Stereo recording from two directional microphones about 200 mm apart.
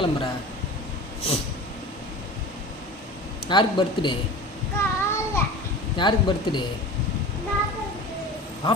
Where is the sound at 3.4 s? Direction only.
25° left (ahead or behind).